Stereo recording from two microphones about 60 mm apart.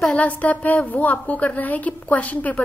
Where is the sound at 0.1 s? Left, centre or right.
Left.